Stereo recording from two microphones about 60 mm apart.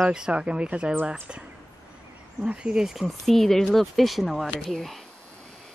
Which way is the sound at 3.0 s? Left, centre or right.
Centre.